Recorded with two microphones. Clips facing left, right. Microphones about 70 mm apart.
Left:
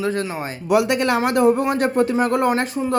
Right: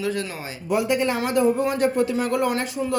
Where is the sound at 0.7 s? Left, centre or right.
Left.